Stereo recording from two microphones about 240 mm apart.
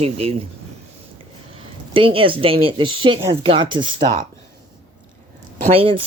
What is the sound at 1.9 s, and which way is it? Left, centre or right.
Speech, right.